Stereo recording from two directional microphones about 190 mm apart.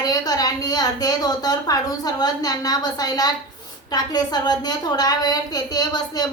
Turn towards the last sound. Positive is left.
turn(degrees=20)  # may be behind; listen again after turning